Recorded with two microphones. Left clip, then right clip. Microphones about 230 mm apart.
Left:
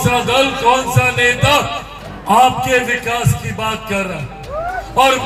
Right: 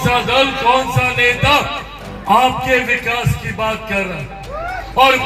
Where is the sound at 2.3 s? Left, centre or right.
Left.